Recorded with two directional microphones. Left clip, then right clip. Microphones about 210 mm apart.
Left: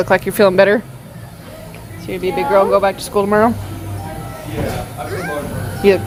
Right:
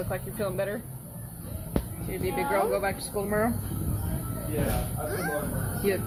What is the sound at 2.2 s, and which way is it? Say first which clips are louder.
A woman's voice: left 13 dB; 25° left (ahead or behind).